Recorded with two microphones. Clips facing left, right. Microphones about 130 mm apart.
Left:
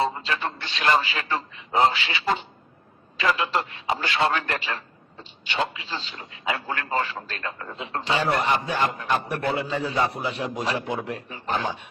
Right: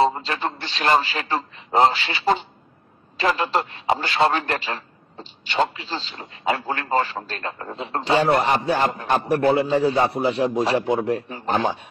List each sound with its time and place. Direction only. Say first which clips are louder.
0.0 s a man's voice: right 5 dB; 35° right (ahead or behind)